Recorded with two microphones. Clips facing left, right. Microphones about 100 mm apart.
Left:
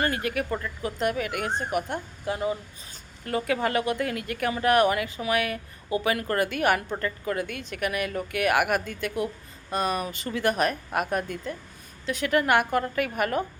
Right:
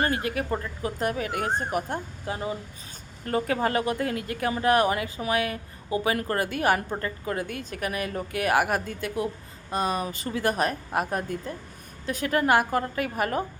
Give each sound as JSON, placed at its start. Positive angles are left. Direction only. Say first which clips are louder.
{"t": 0.0, "sound": "a woman's voice", "louder": "even", "side_deg": -30}